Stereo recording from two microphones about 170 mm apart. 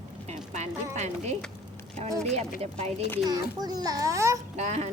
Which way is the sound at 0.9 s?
45° right (ahead or behind).